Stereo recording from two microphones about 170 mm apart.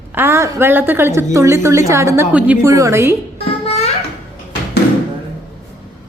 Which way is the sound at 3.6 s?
35° left (ahead or behind).